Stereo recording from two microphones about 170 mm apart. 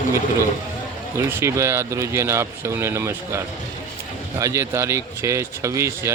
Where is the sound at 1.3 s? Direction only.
15° right (ahead or behind).